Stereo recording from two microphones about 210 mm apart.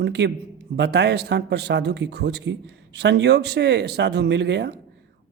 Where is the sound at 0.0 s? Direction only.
55° right (ahead or behind).